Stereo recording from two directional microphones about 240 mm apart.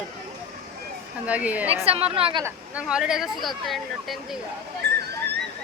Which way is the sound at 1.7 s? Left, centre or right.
Right.